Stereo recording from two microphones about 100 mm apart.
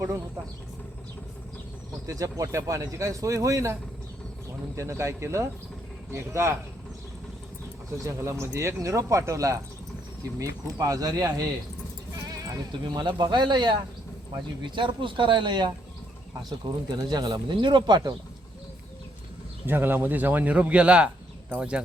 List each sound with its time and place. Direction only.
2.0 s speech: 35° right (ahead or behind)
4.8 s speech: 30° right (ahead or behind)
8.0 s speech: 30° right (ahead or behind)
12.5 s speech: 45° right (ahead or behind)
19.6 s speech: 20° right (ahead or behind)